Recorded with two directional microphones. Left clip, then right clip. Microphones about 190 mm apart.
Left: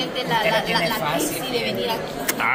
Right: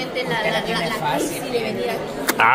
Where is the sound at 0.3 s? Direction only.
15° right (ahead or behind).